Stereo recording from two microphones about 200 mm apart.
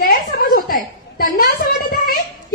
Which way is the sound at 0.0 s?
45° left (ahead or behind).